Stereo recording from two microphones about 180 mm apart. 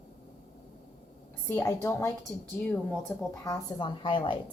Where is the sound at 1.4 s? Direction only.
15° left (ahead or behind).